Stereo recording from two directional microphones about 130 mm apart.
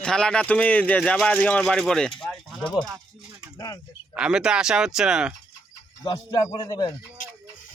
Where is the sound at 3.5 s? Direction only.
25° left (ahead or behind).